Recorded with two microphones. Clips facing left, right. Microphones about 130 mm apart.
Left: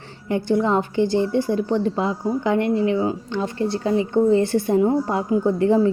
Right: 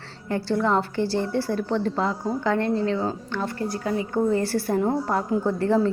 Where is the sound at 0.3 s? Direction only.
20° left (ahead or behind).